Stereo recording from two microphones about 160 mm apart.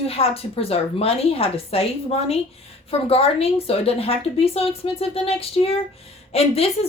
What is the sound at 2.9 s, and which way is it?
Speech, 35° left (ahead or behind).